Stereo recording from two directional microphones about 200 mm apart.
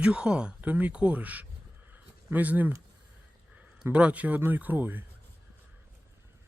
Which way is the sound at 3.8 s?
5° right (ahead or behind).